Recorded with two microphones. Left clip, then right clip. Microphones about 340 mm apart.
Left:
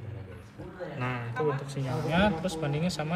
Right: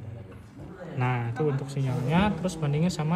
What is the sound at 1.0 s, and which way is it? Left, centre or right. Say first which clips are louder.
Speech: right 5 dB; centre.